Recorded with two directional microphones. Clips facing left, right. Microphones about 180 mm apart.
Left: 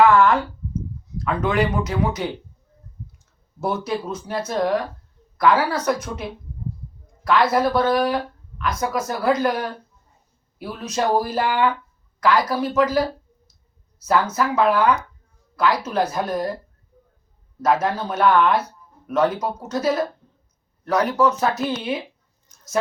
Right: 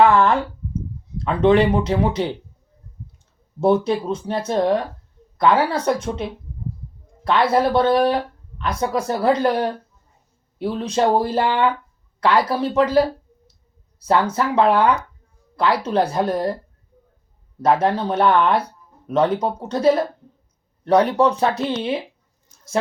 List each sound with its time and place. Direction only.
0.0 s a sound: 30° right (ahead or behind)
1.2 s speech: 30° right (ahead or behind)
3.6 s speech: 30° right (ahead or behind)
7.3 s speech: 30° right (ahead or behind)
17.6 s speech: 30° right (ahead or behind)